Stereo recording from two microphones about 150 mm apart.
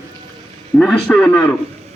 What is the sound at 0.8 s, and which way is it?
Speech, 5° left (ahead or behind).